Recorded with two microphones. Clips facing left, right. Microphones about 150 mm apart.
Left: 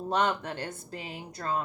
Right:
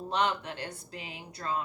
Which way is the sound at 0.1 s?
45° left (ahead or behind).